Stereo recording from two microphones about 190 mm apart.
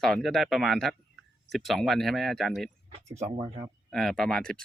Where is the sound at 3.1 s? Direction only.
20° right (ahead or behind).